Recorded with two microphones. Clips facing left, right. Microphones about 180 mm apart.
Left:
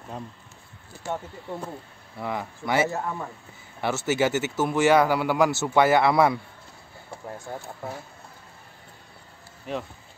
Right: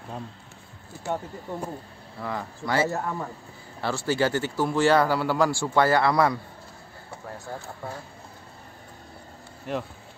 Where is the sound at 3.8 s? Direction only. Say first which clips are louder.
Left 1 dB; 20° left (ahead or behind).